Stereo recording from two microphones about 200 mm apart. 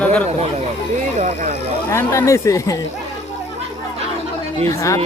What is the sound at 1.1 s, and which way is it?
Speech, 40° right (ahead or behind).